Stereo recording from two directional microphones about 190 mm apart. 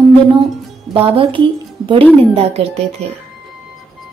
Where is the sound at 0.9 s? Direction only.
25° right (ahead or behind).